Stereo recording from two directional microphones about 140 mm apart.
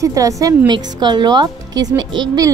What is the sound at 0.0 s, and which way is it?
A woman's voice, 25° right (ahead or behind).